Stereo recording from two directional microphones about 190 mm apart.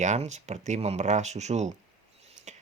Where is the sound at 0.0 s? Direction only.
35° right (ahead or behind).